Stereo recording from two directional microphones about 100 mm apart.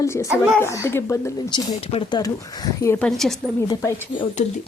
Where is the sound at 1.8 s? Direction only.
80° left.